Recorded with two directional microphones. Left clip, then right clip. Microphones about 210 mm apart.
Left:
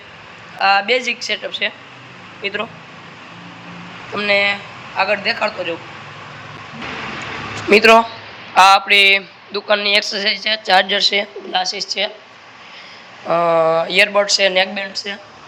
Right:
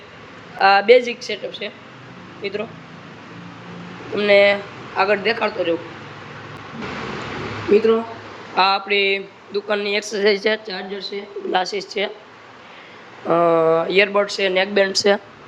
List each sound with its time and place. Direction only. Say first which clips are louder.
0.6 s speech: right 2 dB; 15° right (ahead or behind)
4.1 s speech: right 2 dB; 10° right (ahead or behind)
8.5 s speech: left 7 dB; 10° right (ahead or behind)
10.2 s speech: right 1 dB; 20° right (ahead or behind)
10.7 s speech: left 16 dB; 5° right (ahead or behind)
11.1 s speech: left 3 dB; 15° right (ahead or behind)
13.2 s speech: left 1 dB; 10° right (ahead or behind)
14.8 s speech: right 9 dB; 30° right (ahead or behind)